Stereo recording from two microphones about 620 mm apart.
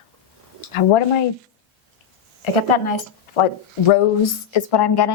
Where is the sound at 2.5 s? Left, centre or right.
Left.